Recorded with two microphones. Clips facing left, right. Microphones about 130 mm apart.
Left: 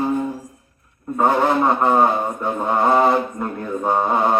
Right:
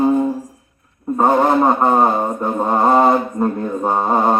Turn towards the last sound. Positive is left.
turn(degrees=-40)  # may be behind; listen again after turning